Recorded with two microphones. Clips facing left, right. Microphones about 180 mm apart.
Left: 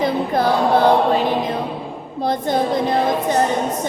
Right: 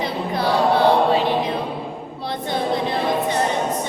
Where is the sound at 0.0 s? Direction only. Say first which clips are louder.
Left 5 dB; 45° left (ahead or behind).